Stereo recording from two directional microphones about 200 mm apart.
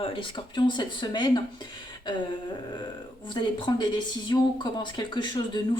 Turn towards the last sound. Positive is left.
turn(degrees=20)  # may be behind; listen again after turning